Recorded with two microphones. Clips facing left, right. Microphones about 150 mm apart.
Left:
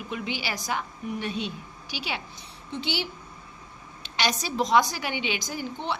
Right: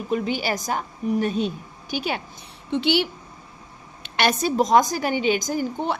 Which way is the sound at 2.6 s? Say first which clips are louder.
Right 10 dB; 65° right (ahead or behind).